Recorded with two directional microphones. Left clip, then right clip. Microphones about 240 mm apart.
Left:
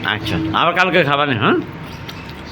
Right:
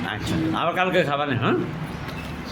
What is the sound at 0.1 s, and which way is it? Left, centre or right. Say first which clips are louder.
A man's voice: left 8 dB; centre.